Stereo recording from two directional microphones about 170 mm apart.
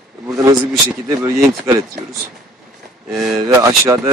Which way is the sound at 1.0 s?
20° right (ahead or behind).